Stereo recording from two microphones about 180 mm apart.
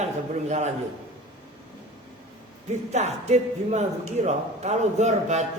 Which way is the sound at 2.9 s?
40° right (ahead or behind).